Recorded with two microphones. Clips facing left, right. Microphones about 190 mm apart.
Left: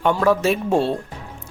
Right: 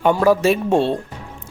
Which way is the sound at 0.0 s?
5° right (ahead or behind).